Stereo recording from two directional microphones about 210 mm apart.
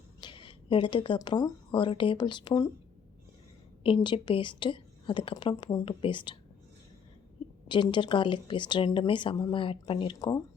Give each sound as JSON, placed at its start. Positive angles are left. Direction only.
{"t": 0.2, "sound": "speech", "side_deg": 25}
{"t": 3.8, "sound": "speech", "side_deg": 25}
{"t": 7.7, "sound": "speech", "side_deg": 25}